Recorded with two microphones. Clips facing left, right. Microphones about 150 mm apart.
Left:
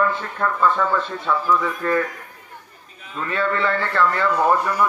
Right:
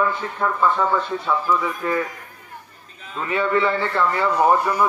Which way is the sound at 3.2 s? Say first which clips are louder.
Right 2 dB; 15° right (ahead or behind).